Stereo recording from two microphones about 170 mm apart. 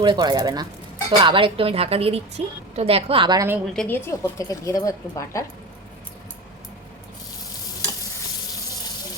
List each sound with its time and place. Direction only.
0.0 s a woman's voice: 25° right (ahead or behind)
3.8 s speech: 10° left (ahead or behind)